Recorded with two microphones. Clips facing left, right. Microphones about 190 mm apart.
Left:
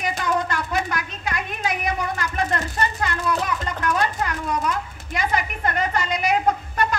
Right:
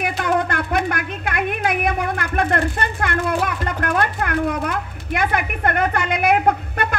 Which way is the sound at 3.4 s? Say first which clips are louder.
Right 2 dB; 55° right (ahead or behind).